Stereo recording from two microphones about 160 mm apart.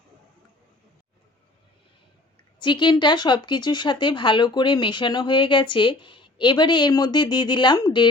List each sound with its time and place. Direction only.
2.6 s a woman's voice: 30° left (ahead or behind)